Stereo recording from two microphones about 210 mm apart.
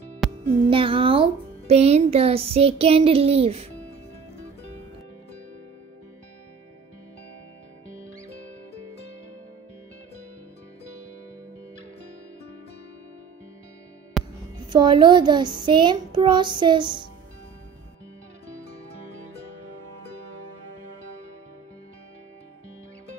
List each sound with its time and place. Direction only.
0.5 s speech: 25° right (ahead or behind)
14.7 s speech: 20° right (ahead or behind)